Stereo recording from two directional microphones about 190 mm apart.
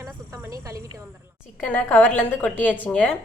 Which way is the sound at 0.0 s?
15° right (ahead or behind).